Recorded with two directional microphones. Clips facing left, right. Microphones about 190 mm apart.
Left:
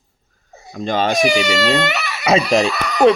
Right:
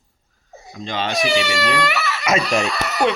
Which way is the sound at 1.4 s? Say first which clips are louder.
Left 4 dB; 25° left (ahead or behind).